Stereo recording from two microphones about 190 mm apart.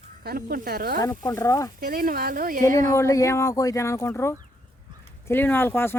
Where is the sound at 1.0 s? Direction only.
15° left (ahead or behind).